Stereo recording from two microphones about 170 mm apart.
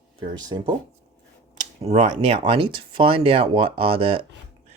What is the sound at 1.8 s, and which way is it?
Speech, 40° right (ahead or behind).